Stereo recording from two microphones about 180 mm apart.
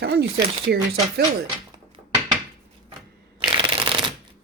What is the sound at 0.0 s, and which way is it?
Speech, 60° right (ahead or behind).